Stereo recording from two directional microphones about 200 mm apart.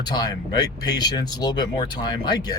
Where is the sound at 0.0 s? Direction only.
20° left (ahead or behind).